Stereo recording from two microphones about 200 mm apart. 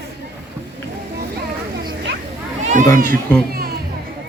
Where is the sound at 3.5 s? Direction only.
50° right (ahead or behind).